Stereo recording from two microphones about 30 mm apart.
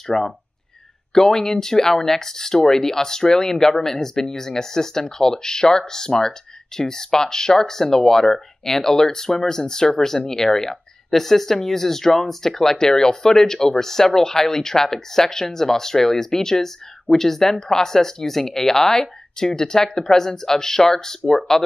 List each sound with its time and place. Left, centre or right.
0.0 s speech: centre